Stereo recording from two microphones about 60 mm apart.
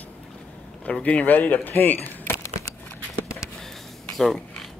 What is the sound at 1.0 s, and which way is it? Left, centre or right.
Speech, left.